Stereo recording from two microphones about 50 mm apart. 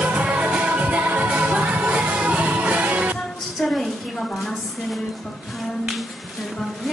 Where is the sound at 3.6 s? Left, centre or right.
Centre.